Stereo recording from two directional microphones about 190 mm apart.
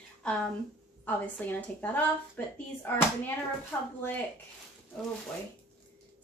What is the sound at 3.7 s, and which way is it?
Speech, 10° left (ahead or behind).